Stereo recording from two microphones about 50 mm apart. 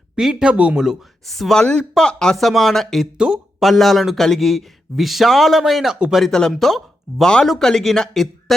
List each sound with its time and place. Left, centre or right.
0.2 s speech: centre
0.4 s speech: right
1.3 s a man's voice: centre
1.5 s speech: centre
2.3 s a man's voice: centre
3.2 s speech: centre
3.6 s a man's voice: centre